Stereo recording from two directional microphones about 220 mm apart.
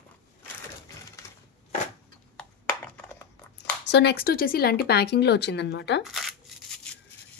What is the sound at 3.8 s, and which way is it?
Speech, 50° left (ahead or behind).